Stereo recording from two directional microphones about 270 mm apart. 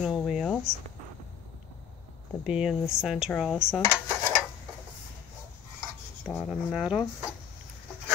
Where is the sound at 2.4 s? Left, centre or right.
Centre.